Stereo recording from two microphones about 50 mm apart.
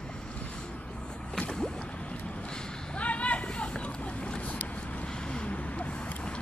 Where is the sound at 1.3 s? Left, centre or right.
Centre.